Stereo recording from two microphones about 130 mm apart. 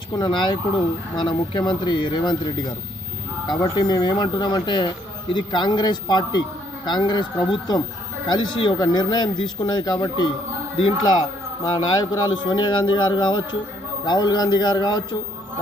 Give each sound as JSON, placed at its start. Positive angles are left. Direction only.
{"t": 0.2, "sound": "speech", "side_deg": 35}
{"t": 3.4, "sound": "speech", "side_deg": 35}
{"t": 11.6, "sound": "speech", "side_deg": 30}